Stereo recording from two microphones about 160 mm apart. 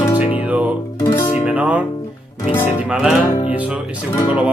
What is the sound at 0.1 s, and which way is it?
Music, 35° left (ahead or behind).